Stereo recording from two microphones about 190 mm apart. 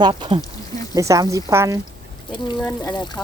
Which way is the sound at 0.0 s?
25° right (ahead or behind).